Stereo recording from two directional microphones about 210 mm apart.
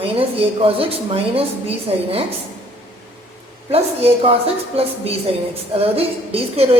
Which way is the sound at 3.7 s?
30° right (ahead or behind).